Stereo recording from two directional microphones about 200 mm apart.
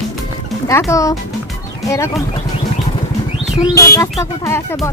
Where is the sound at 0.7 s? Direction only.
15° left (ahead or behind).